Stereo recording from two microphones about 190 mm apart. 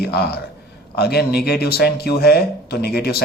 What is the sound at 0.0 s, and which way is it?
Speech, 55° left (ahead or behind).